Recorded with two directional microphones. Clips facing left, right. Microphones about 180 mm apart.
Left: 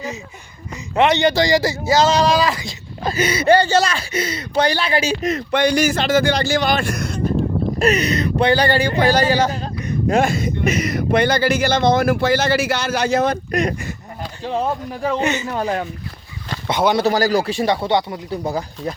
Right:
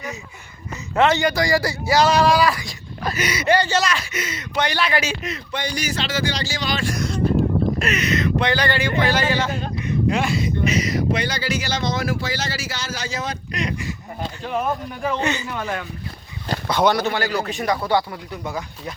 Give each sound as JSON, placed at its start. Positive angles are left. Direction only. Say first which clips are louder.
{"t": 0.9, "sound": "speech", "louder": "left 3 dB", "side_deg": 20}
{"t": 5.5, "sound": "speech", "louder": "left 11 dB", "side_deg": 65}
{"t": 7.8, "sound": "speech", "louder": "left 5 dB", "side_deg": 35}
{"t": 14.4, "sound": "speech", "louder": "left 3 dB", "side_deg": 30}
{"t": 15.2, "sound": "speech", "louder": "left 3 dB", "side_deg": 20}
{"t": 15.4, "sound": "speech", "louder": "left 6 dB", "side_deg": 35}
{"t": 17.1, "sound": "speech", "louder": "left 6 dB", "side_deg": 40}
{"t": 18.4, "sound": "speech", "louder": "left 5 dB", "side_deg": 35}